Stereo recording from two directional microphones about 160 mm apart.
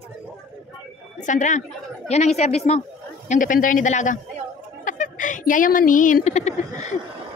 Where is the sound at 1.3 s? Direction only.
50° left (ahead or behind).